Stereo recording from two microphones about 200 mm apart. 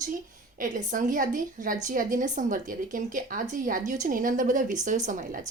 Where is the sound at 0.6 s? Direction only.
40° right (ahead or behind).